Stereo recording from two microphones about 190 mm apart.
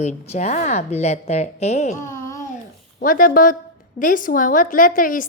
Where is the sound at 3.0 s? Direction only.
45° left (ahead or behind).